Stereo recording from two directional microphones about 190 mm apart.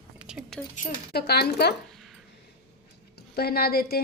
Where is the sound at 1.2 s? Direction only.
60° left (ahead or behind).